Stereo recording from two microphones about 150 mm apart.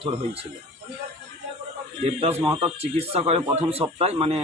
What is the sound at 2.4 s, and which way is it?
Speech, 35° right (ahead or behind).